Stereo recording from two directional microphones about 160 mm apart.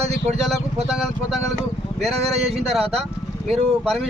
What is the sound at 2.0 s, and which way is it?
Speech, centre (ahead or behind).